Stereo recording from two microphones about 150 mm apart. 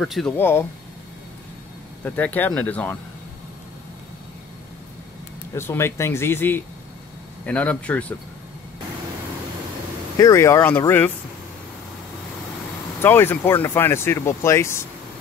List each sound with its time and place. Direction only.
0.0 s speech: centre (ahead or behind)
0.4 s speech: 15° left (ahead or behind)
2.0 s speech: 10° left (ahead or behind)
5.5 s speech: 15° left (ahead or behind)
10.1 s speech: 20° left (ahead or behind)
13.0 s speech: 15° left (ahead or behind)